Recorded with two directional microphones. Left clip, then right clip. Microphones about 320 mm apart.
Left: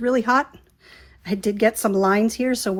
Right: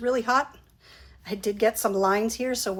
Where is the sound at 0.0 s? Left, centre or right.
Left.